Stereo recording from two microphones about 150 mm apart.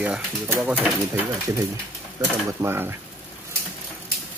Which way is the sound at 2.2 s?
25° right (ahead or behind).